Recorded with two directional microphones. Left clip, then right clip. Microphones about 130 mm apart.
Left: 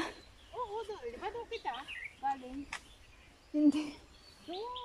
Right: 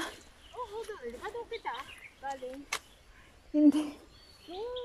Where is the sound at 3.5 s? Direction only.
Centre (ahead or behind).